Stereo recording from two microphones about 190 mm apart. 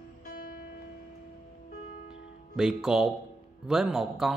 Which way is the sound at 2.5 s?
5° right (ahead or behind).